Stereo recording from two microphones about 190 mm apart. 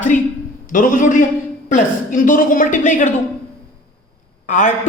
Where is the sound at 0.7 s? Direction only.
45° left (ahead or behind).